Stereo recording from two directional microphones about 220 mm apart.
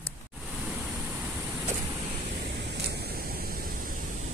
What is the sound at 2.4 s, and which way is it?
Pink noise, 50° right (ahead or behind).